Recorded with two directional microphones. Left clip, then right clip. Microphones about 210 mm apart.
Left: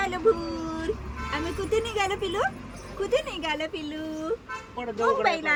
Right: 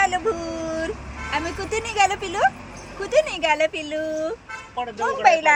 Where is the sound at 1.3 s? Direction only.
Centre (ahead or behind).